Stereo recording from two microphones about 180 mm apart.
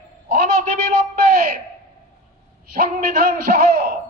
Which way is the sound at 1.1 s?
55° right (ahead or behind).